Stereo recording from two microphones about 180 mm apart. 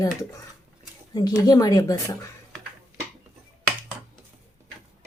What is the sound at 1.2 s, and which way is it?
A woman's voice, 20° left (ahead or behind).